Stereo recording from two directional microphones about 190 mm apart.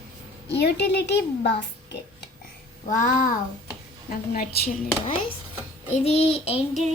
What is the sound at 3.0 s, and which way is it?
Speech, 45° left (ahead or behind).